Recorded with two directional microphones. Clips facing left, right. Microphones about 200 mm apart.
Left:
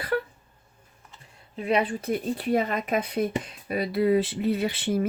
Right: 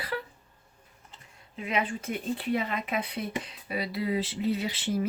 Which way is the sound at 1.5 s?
35° left (ahead or behind).